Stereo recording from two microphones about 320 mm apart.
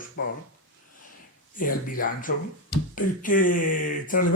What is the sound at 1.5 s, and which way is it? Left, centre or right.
Speech, left.